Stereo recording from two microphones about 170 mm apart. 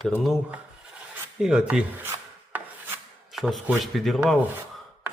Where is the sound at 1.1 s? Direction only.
5° right (ahead or behind).